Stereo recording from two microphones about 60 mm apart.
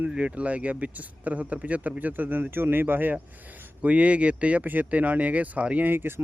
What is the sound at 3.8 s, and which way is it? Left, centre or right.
Speech, right.